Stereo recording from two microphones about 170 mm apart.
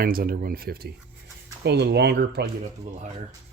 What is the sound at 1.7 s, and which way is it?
Speech, 80° right.